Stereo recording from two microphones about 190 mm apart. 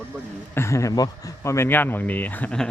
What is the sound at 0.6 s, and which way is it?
Speech, 15° left (ahead or behind).